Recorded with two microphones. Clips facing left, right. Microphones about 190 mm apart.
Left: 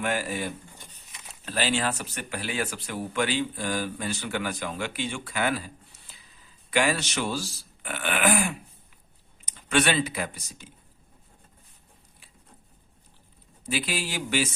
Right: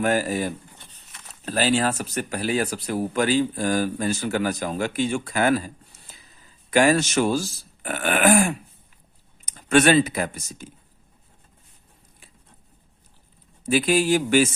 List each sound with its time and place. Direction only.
0.0 s speech: 40° right (ahead or behind)
0.8 s a sound: 10° left (ahead or behind)
1.5 s speech: 40° right (ahead or behind)
13.7 s speech: 45° right (ahead or behind)